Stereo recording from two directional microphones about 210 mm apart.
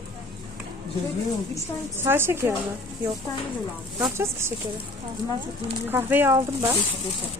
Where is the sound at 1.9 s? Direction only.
10° right (ahead or behind).